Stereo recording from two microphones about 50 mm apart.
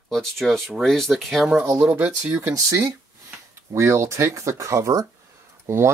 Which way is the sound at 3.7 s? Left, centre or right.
Right.